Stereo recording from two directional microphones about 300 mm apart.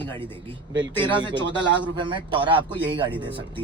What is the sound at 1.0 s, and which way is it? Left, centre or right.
Speech, centre.